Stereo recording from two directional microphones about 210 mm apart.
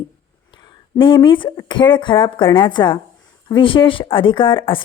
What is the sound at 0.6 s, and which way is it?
A woman's voice, 25° left (ahead or behind).